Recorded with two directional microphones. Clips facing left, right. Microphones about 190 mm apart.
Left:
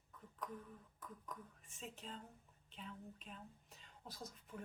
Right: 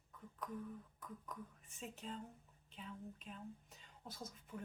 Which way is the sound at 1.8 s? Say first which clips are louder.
Right 3 dB; 5° right (ahead or behind).